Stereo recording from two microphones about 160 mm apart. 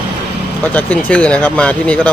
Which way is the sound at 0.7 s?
10° left (ahead or behind).